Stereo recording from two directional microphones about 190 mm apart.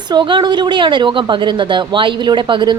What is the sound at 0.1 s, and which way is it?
A woman's voice, 25° right (ahead or behind).